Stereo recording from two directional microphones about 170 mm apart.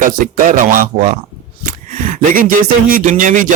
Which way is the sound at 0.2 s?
55° right (ahead or behind).